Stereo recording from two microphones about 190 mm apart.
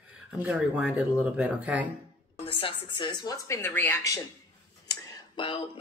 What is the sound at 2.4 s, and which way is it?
Speech, 30° left (ahead or behind).